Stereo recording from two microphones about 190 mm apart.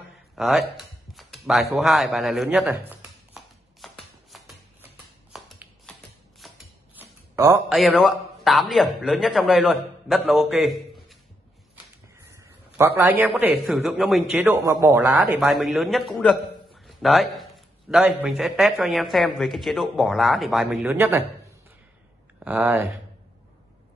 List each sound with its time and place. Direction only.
0.4 s a sound: centre (ahead or behind)
7.0 s a sound: 15° right (ahead or behind)
7.7 s a man's voice: centre (ahead or behind)
12.2 s a man's voice: 15° right (ahead or behind)
14.5 s a man's voice: 15° right (ahead or behind)
22.4 s speech: 10° right (ahead or behind)